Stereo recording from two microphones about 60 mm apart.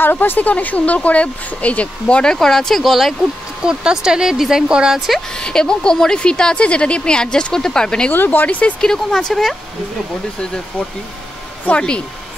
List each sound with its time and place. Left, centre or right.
0.0 s speech: left; by 3.2 s centre
3.6 s speech: centre
5.3 s speech: centre
8.1 s speech: left
8.8 s speech: centre
11.6 s speech: centre